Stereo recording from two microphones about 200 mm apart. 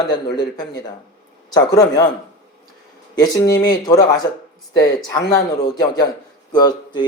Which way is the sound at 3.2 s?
20° left (ahead or behind).